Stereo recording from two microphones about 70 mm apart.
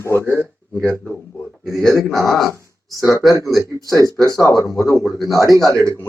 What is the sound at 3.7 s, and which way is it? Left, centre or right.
Speech, left.